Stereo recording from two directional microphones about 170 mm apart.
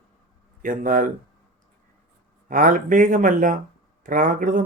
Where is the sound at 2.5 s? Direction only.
50° right (ahead or behind).